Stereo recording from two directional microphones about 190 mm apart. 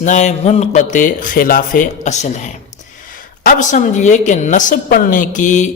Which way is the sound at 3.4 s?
45° left (ahead or behind).